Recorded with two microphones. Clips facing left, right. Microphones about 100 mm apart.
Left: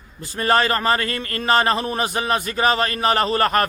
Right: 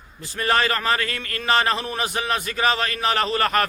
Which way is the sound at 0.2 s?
35° left (ahead or behind).